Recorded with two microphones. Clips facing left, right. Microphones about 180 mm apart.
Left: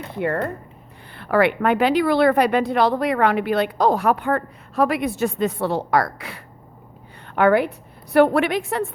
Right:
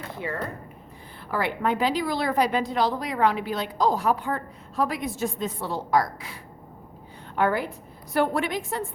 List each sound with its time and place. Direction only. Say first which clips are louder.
0.2 s a woman's voice: left 9 dB; 60° left (ahead or behind)